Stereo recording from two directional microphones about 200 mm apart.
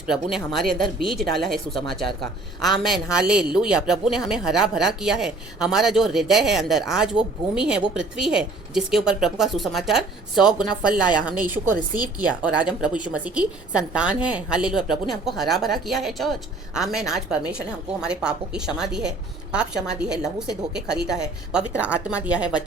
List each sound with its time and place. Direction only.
0.1 s speech: centre (ahead or behind)